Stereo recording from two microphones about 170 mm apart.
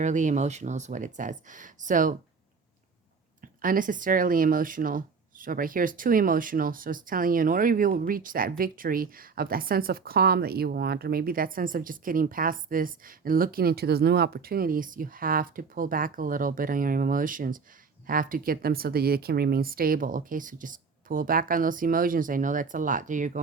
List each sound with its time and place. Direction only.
0.0 s speech: 45° right (ahead or behind)
3.4 s speech: 55° right (ahead or behind)